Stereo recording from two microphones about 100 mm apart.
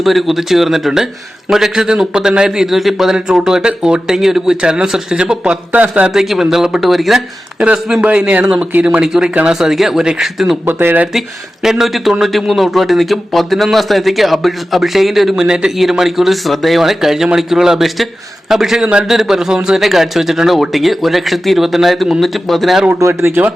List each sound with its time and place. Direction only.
0.0 s a man's voice: centre (ahead or behind)
10.7 s speech: 20° right (ahead or behind)
11.6 s a man's voice: 5° right (ahead or behind)
23.0 s speech: 25° right (ahead or behind)